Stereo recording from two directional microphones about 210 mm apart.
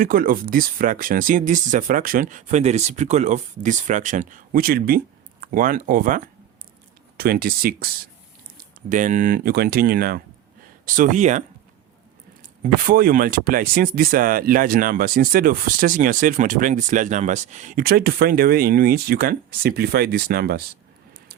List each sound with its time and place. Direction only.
0.0 s speech: 40° right (ahead or behind)
8.9 s speech: 35° right (ahead or behind)